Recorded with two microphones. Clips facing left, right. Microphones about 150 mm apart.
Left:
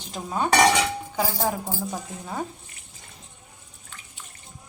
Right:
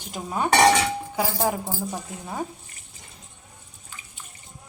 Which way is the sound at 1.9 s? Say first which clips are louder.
Even; 5° right (ahead or behind).